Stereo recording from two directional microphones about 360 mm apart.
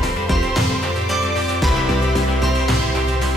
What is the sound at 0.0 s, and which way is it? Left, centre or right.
Music, centre.